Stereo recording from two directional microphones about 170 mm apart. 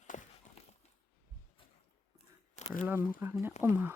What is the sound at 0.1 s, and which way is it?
Clip-clop, 45° left (ahead or behind).